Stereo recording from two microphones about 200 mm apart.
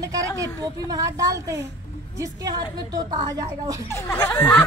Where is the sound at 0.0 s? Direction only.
15° right (ahead or behind).